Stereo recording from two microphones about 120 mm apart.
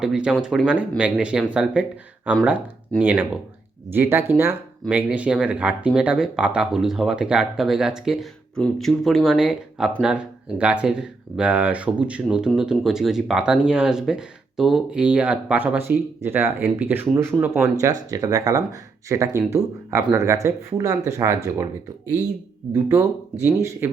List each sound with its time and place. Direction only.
0.0 s speech: 5° right (ahead or behind); by 23.9 s 20° right (ahead or behind)